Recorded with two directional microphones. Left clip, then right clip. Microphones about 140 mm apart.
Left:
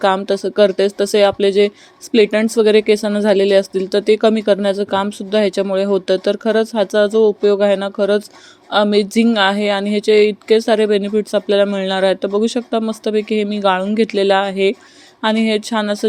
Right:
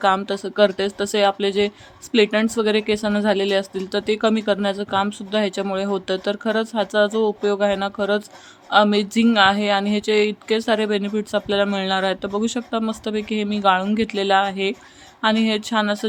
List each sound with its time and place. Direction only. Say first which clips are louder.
0.4 s speech: left 5 dB; 35° left (ahead or behind)